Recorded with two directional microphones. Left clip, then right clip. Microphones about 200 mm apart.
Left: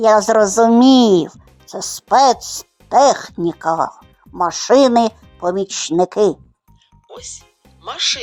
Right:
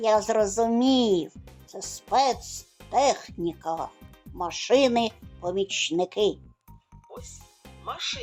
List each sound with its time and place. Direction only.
0.0 s speech: 40° left (ahead or behind)